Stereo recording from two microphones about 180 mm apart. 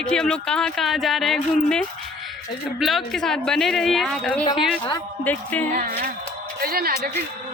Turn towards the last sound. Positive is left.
turn(degrees=-55)  # may be behind; listen again after turning